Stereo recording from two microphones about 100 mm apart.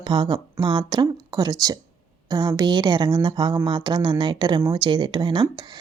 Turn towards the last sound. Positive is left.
turn(degrees=-55)  # may be behind; listen again after turning